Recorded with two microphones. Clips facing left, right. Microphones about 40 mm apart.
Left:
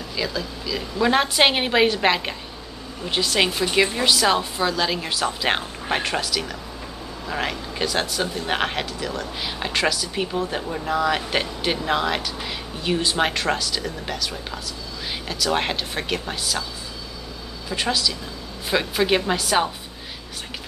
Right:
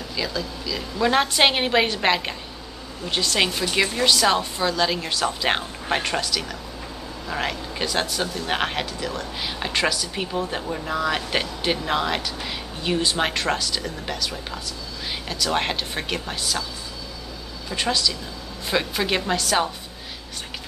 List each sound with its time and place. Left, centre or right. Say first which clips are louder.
0.1 s speech: left 1 dB; centre
17.6 s a woman's voice: even; centre